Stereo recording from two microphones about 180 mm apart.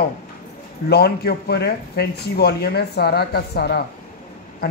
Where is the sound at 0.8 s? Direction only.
60° left (ahead or behind).